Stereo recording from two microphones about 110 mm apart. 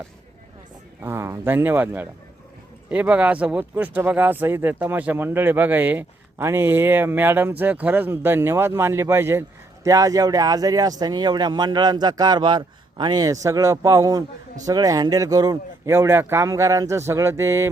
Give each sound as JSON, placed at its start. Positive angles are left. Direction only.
{"t": 1.0, "sound": "speech", "side_deg": -25}